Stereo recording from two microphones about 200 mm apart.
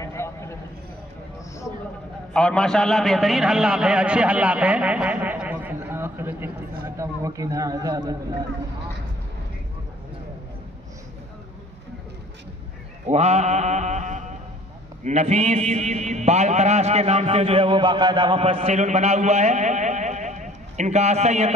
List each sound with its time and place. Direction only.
0.0 s a sound: 15° left (ahead or behind)
2.3 s a man's voice: 5° left (ahead or behind); by 8.2 s 20° right (ahead or behind)
13.0 s mantra: 35° right (ahead or behind)
15.0 s a man's voice: 35° right (ahead or behind)